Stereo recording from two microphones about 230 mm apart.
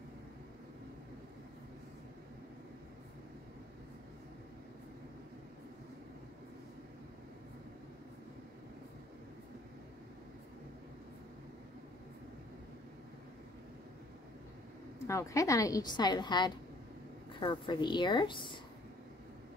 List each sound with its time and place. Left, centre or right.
15.0 s a woman's voice: centre